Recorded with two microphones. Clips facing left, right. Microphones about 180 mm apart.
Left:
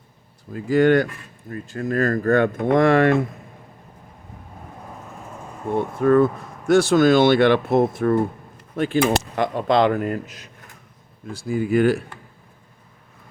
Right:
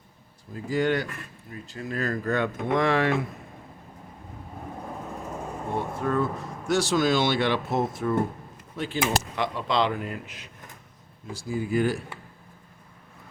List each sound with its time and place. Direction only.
0.5 s speech: 60° left (ahead or behind)
6.0 s speech: 55° left (ahead or behind); by 10.5 s 40° left (ahead or behind)
11.3 s speech: 60° left (ahead or behind)